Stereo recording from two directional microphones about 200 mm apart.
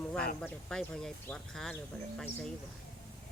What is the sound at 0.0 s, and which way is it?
Snake, 5° left (ahead or behind).